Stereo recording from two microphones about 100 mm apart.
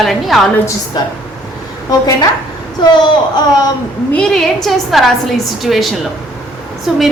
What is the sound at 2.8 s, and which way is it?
Speech, 50° left (ahead or behind).